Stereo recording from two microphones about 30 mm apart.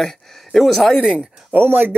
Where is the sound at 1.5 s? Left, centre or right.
Right.